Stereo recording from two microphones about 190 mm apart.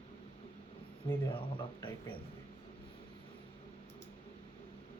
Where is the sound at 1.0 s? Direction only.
25° left (ahead or behind).